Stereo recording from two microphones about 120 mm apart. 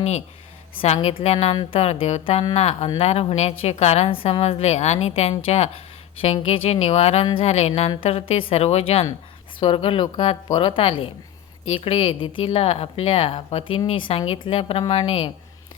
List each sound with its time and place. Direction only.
1.0 s a woman's voice: 65° left (ahead or behind)
7.8 s a woman's voice: 50° left (ahead or behind)
9.6 s a woman's voice: 50° left (ahead or behind)